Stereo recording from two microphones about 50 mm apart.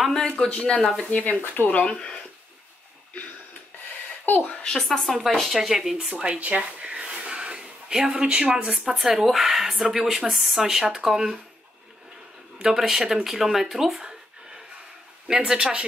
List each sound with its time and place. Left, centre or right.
0.2 s speech: centre
1.1 s speech: left
1.9 s speech: centre
4.3 s speech: left
4.7 s speech: centre
5.9 s speech: centre
6.4 s a sound: right
8.9 s speech: centre
12.6 s speech: centre
15.2 s speech: centre